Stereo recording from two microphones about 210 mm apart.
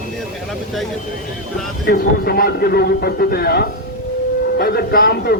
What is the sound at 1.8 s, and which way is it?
A man's voice, 45° left (ahead or behind).